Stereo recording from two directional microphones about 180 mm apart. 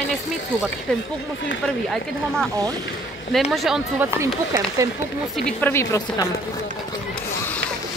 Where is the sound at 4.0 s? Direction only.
15° right (ahead or behind).